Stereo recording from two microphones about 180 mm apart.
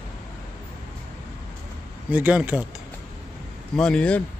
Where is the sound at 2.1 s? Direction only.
10° right (ahead or behind).